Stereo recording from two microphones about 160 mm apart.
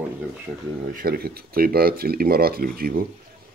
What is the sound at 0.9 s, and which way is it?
Speech, 75° right (ahead or behind).